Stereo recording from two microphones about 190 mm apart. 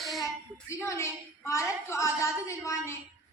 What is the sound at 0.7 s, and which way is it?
A woman's voice, 15° left (ahead or behind).